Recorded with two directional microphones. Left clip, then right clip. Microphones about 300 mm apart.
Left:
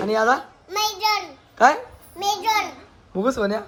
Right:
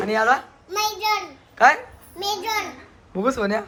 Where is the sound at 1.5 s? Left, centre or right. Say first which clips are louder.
Right 1 dB; centre.